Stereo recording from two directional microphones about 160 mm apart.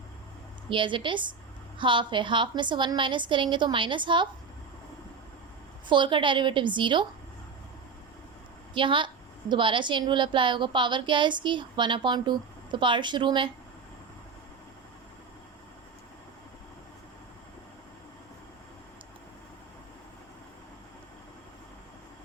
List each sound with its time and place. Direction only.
0.7 s a woman's voice: 30° right (ahead or behind)
5.9 s a woman's voice: 30° right (ahead or behind)
8.7 s a woman's voice: 30° right (ahead or behind)